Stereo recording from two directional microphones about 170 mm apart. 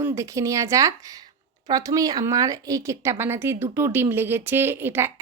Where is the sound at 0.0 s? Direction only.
20° right (ahead or behind).